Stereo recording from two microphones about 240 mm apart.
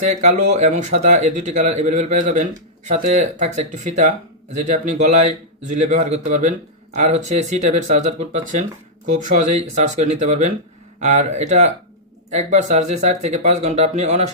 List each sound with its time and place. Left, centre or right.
0.1 s a man's voice: right